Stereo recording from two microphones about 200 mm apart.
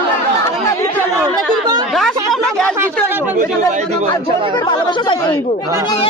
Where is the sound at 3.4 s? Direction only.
40° right (ahead or behind).